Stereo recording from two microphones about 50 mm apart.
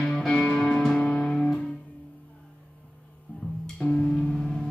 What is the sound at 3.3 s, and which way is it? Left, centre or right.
Music, left.